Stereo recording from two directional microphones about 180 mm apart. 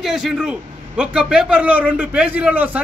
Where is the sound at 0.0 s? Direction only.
Centre (ahead or behind).